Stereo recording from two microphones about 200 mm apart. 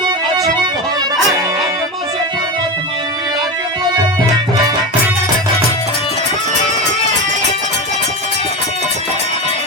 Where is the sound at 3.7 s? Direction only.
20° right (ahead or behind).